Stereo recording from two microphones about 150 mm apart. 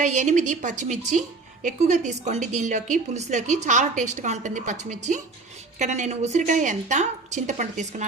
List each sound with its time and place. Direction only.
0.0 s a woman's voice: 55° right (ahead or behind)